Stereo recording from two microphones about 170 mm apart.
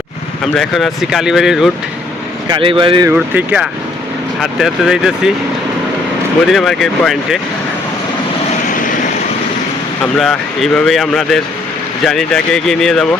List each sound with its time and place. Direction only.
0.5 s speech: centre (ahead or behind)
2.5 s speech: 30° right (ahead or behind)
3.1 s speech: 10° right (ahead or behind)
6.5 s speech: centre (ahead or behind)
10.0 s speech: centre (ahead or behind)